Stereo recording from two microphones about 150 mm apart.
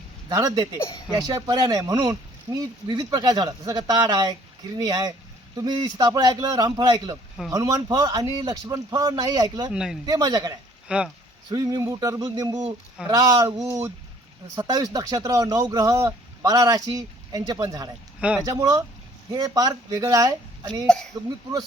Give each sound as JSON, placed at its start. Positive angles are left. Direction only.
{"t": 0.3, "sound": "speech", "side_deg": -20}
{"t": 9.7, "sound": "speech", "side_deg": -5}
{"t": 10.1, "sound": "speech", "side_deg": -25}
{"t": 10.8, "sound": "speech", "side_deg": -5}
{"t": 11.4, "sound": "speech", "side_deg": -25}
{"t": 18.2, "sound": "speech", "side_deg": -10}
{"t": 18.4, "sound": "speech", "side_deg": -25}
{"t": 20.8, "sound": "speech", "side_deg": 5}